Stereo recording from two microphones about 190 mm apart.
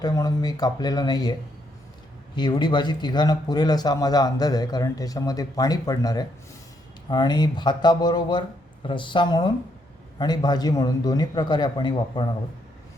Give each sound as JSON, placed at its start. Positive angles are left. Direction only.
{"t": 0.0, "sound": "speech", "side_deg": 20}